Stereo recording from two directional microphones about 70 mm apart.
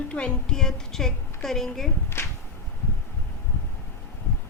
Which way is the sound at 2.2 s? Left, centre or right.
Left.